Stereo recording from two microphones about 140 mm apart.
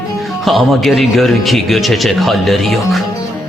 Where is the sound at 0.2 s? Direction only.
Centre (ahead or behind).